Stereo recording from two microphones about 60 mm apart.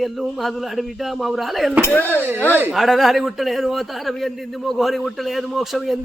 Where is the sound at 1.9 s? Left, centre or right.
Left.